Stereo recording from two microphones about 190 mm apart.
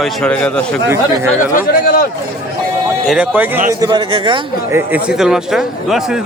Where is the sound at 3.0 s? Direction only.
5° right (ahead or behind).